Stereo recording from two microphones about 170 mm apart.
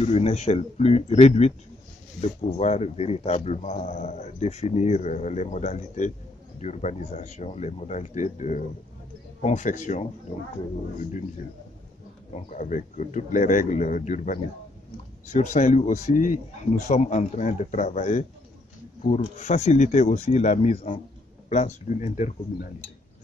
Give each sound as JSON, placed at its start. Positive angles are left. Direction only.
{"t": 0.0, "sound": "speech", "side_deg": 40}
{"t": 12.4, "sound": "speech", "side_deg": 50}
{"t": 19.3, "sound": "speech", "side_deg": 40}